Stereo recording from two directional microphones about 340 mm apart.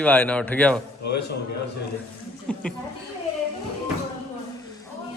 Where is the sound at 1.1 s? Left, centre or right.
Left.